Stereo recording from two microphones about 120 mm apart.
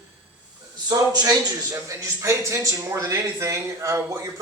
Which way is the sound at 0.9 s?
35° right (ahead or behind).